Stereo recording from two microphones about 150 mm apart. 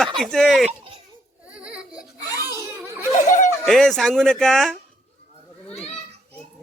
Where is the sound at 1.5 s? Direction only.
5° right (ahead or behind).